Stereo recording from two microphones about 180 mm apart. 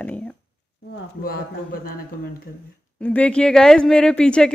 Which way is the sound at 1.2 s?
55° left (ahead or behind).